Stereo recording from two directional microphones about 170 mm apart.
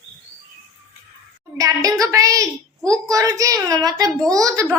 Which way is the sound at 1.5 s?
20° right (ahead or behind).